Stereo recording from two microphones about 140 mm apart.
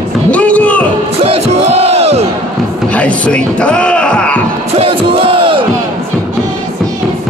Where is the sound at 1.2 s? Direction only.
50° right (ahead or behind).